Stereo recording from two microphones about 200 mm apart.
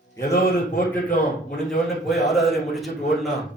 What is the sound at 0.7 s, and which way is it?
Speech, 45° left (ahead or behind).